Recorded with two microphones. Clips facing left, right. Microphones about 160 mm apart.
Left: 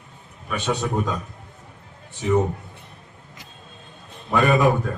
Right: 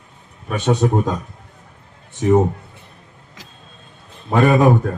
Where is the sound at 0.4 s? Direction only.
45° right (ahead or behind).